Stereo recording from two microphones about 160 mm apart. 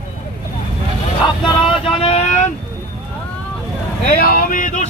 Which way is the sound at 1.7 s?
35° left (ahead or behind).